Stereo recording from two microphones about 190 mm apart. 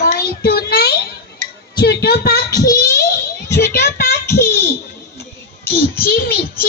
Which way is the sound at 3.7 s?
55° left (ahead or behind).